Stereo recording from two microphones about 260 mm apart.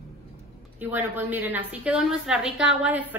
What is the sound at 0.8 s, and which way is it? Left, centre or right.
A woman's voice, centre.